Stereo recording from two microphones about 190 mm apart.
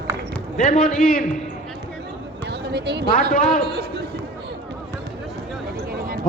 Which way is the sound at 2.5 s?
60° right (ahead or behind).